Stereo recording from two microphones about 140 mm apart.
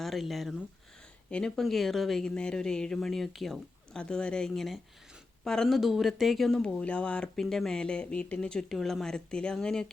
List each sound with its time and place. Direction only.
0.0 s speech: centre (ahead or behind)